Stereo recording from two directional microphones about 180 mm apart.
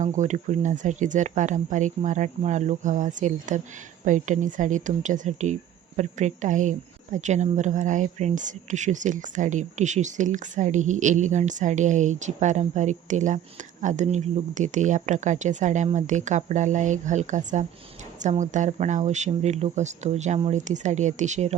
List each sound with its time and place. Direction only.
0.0 s a woman's voice: 45° right (ahead or behind)